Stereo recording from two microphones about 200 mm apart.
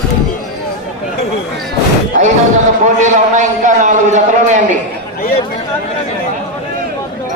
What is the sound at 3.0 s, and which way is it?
A man's voice, 40° right (ahead or behind).